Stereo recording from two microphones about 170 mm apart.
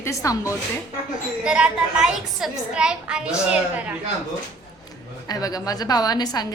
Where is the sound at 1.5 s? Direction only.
5° right (ahead or behind).